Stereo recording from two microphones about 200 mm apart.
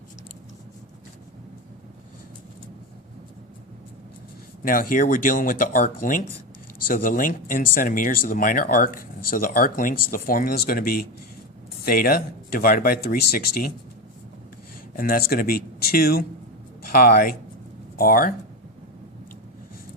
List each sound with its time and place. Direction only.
4.6 s speech: 45° left (ahead or behind)
14.9 s speech: 50° left (ahead or behind)